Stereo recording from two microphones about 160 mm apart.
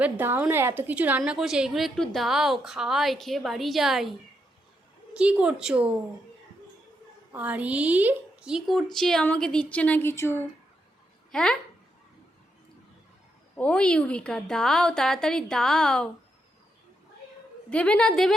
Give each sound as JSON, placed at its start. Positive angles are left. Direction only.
{"t": 0.0, "sound": "a woman's voice", "side_deg": -10}
{"t": 5.1, "sound": "a woman's voice", "side_deg": -5}
{"t": 7.3, "sound": "a woman's voice", "side_deg": -10}
{"t": 11.3, "sound": "a child's voice", "side_deg": 5}
{"t": 13.6, "sound": "a woman's voice", "side_deg": 5}
{"t": 17.7, "sound": "a woman's voice", "side_deg": 5}